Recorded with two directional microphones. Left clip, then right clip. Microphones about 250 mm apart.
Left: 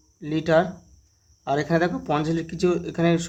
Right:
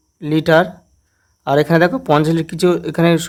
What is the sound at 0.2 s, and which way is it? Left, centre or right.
Speech, right.